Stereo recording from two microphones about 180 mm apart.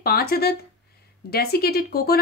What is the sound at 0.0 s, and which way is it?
A woman's voice, 60° left (ahead or behind).